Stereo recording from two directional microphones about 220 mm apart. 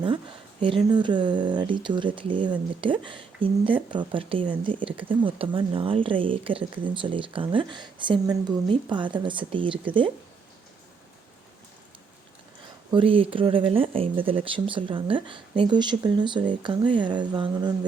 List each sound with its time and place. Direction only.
0.9 s speech: 20° right (ahead or behind)
12.9 s speech: 25° right (ahead or behind)